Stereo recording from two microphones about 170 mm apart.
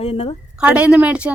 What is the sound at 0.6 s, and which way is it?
Speech, 10° right (ahead or behind).